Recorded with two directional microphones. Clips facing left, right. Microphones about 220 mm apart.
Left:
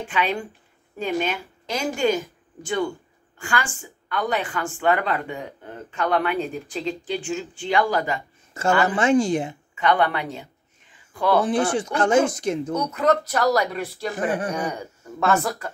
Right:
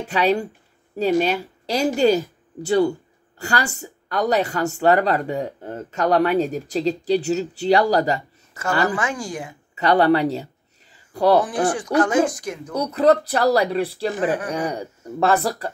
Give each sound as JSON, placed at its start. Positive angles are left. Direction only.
{"t": 0.1, "sound": "a woman's voice", "side_deg": -40}
{"t": 8.8, "sound": "speech", "side_deg": 25}
{"t": 9.8, "sound": "a sound", "side_deg": -35}
{"t": 11.4, "sound": "speech", "side_deg": 25}
{"t": 12.7, "sound": "a woman's voice", "side_deg": -35}